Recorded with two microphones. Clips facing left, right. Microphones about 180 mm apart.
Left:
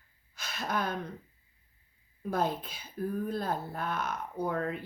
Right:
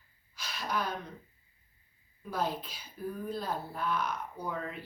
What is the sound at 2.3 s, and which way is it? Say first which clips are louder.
Speech: left 3 dB; 50° left (ahead or behind).